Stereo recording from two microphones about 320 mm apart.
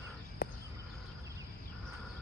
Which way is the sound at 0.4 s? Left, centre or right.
Left.